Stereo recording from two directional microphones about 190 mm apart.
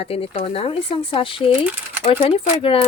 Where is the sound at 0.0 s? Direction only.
30° left (ahead or behind).